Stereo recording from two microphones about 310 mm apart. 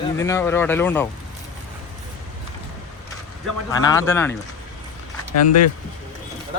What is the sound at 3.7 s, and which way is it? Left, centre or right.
Speech, centre.